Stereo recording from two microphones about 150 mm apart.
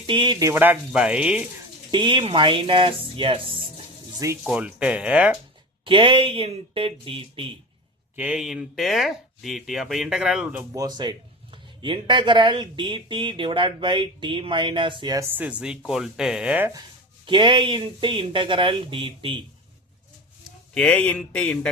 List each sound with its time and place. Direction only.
0.0 s speech: 35° right (ahead or behind); by 1.5 s 5° right (ahead or behind)
1.9 s speech: 30° right (ahead or behind)
4.5 s speech: 10° right (ahead or behind)
5.8 s speech: 35° right (ahead or behind)
8.1 s speech: 10° right (ahead or behind)
10.8 s speech: 30° right (ahead or behind)
15.3 s speech: 10° right (ahead or behind)
17.2 s speech: 30° right (ahead or behind)
20.7 s speech: 10° left (ahead or behind)